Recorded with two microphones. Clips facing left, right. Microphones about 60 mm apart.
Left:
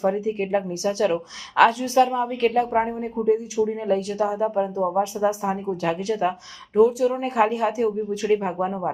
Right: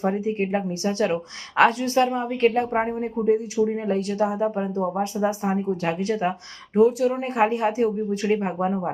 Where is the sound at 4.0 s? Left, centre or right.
Right.